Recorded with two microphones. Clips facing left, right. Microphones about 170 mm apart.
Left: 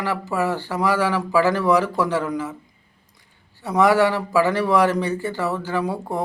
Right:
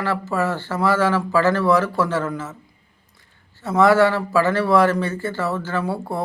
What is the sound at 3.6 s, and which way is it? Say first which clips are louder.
A man's voice: right 2 dB; 15° left (ahead or behind).